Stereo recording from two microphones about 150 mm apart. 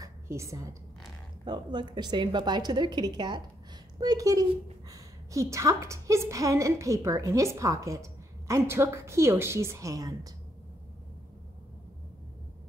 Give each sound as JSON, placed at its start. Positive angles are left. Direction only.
{"t": 0.0, "sound": "a woman's voice", "side_deg": -20}